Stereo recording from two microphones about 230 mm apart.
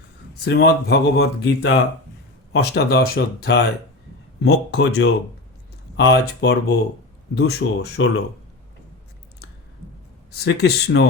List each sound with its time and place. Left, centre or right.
0.3 s speech: left
10.3 s speech: left